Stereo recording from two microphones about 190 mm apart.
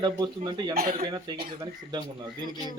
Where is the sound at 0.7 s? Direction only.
50° right (ahead or behind).